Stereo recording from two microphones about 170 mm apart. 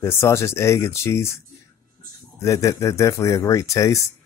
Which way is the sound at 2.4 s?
20° left (ahead or behind).